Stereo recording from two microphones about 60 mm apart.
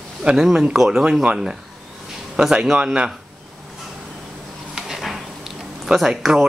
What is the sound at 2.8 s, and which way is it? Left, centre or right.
Speech, centre.